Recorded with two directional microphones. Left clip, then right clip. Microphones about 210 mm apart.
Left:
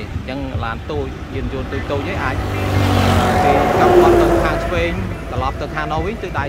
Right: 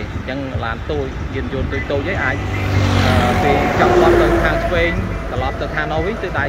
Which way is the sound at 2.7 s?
45° left (ahead or behind).